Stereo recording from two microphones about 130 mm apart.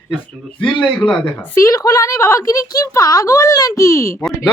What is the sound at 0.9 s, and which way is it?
Speech, 10° left (ahead or behind).